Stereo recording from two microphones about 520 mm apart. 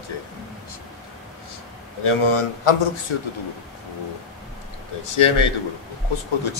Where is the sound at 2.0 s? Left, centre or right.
Left.